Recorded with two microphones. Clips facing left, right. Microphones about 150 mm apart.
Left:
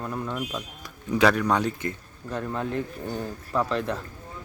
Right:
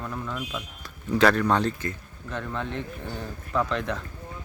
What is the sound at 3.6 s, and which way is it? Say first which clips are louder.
Speech: left 2 dB; 35° left (ahead or behind).